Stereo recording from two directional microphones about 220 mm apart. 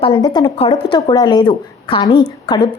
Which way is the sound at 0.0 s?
25° left (ahead or behind).